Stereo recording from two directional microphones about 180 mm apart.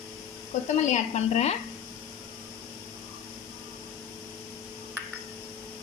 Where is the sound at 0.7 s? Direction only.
40° left (ahead or behind).